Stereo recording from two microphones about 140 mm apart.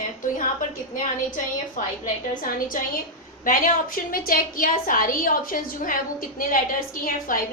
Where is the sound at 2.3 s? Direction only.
75° left (ahead or behind).